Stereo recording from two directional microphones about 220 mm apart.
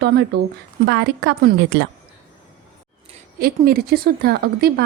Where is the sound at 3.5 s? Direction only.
45° right (ahead or behind).